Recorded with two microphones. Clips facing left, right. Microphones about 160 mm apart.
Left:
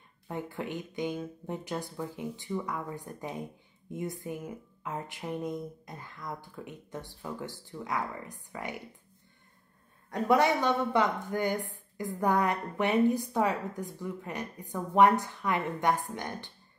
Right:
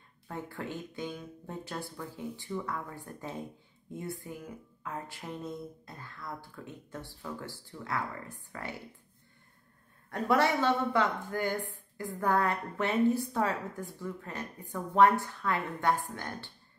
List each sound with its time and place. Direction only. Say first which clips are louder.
0.3 s a woman's voice: left 3 dB; 20° left (ahead or behind)
10.1 s a woman's voice: left 2 dB; 20° left (ahead or behind)